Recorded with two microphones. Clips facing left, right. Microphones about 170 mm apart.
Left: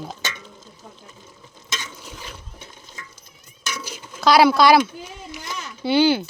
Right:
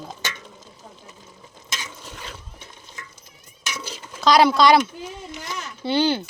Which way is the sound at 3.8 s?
5° left (ahead or behind).